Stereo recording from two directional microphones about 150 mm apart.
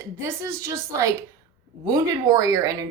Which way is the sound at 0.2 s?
20° right (ahead or behind).